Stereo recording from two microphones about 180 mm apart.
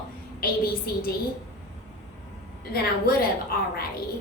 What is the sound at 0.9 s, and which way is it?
Speech, 55° left (ahead or behind).